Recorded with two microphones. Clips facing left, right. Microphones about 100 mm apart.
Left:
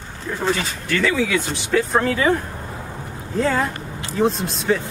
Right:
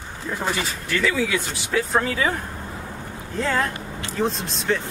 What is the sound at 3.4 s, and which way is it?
Speech, 10° left (ahead or behind).